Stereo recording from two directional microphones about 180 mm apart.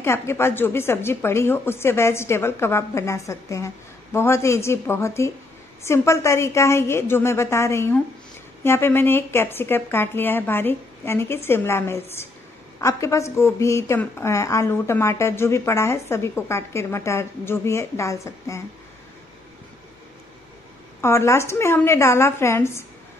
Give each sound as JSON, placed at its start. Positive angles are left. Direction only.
{"t": 0.0, "sound": "a woman's voice", "side_deg": 15}
{"t": 21.0, "sound": "a woman's voice", "side_deg": 15}